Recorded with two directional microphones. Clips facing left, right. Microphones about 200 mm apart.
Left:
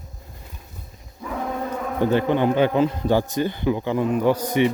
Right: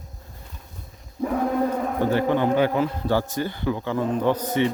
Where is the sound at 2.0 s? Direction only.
20° left (ahead or behind).